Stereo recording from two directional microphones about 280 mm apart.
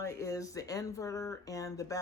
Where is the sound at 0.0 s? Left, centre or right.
Centre.